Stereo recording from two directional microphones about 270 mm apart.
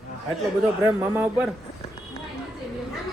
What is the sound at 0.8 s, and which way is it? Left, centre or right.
Speech, centre.